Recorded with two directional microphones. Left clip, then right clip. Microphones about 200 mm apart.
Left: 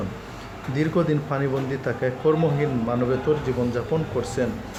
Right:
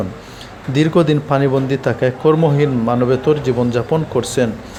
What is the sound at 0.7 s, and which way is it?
Speech, 30° right (ahead or behind).